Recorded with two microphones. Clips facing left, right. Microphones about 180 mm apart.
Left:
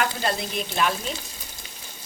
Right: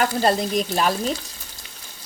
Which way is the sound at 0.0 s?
40° right (ahead or behind).